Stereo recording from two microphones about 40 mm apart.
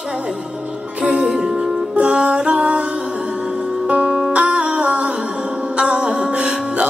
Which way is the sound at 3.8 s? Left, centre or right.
Right.